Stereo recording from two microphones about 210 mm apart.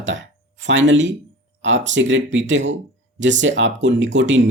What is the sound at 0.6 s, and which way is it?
Speech, 60° right (ahead or behind).